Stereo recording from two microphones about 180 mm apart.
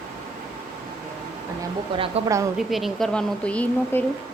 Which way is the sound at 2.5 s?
Centre (ahead or behind).